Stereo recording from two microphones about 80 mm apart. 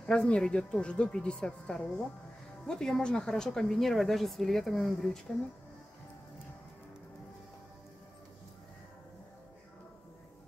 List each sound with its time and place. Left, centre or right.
0.0 s a woman's voice: centre